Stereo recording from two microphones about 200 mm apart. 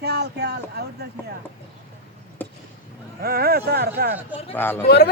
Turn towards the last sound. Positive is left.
turn(degrees=55)  # may be behind; listen again after turning